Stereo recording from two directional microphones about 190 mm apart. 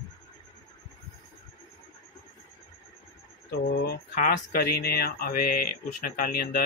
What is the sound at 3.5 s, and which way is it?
Speech, 55° left (ahead or behind).